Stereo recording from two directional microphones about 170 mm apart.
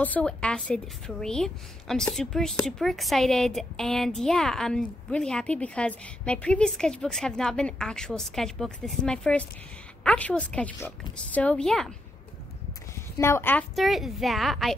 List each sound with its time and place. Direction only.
0.0 s a woman's voice: 10° left (ahead or behind)
13.2 s a woman's voice: 15° left (ahead or behind)
13.7 s a woman's voice: centre (ahead or behind)